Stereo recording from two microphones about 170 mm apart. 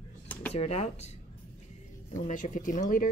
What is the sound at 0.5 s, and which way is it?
Speech, 40° left (ahead or behind).